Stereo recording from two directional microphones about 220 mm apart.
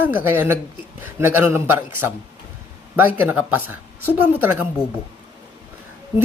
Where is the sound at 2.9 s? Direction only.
10° right (ahead or behind).